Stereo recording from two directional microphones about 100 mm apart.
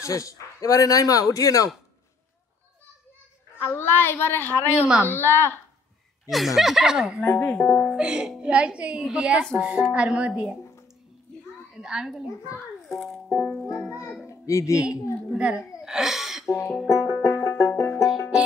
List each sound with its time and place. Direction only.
0.0 s speech: 35° left (ahead or behind)
3.5 s a woman's voice: 25° left (ahead or behind)
6.2 s speech: centre (ahead or behind)
7.2 s a woman's voice: 20° left (ahead or behind)
7.9 s a woman's voice: 10° right (ahead or behind)
11.7 s a child's voice: 5° right (ahead or behind)
13.3 s a woman's voice: 20° left (ahead or behind)
15.3 s a woman's voice: 10° right (ahead or behind)
16.4 s music: 25° left (ahead or behind)
16.8 s banjo: 25° left (ahead or behind)